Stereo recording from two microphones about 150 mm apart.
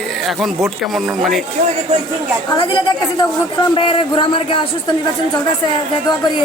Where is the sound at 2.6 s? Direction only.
30° left (ahead or behind).